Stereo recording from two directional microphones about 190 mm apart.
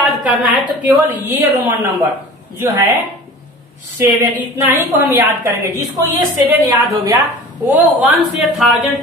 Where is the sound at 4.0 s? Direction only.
15° right (ahead or behind).